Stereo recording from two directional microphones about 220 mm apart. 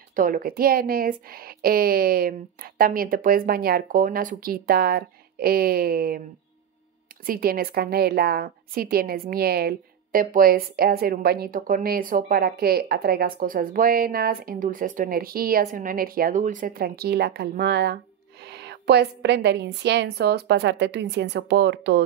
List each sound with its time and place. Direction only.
0.1 s a woman's voice: 40° right (ahead or behind)
7.2 s a woman's voice: 40° right (ahead or behind)